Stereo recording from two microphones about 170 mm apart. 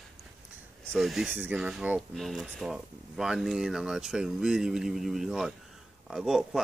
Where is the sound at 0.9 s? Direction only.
Centre (ahead or behind).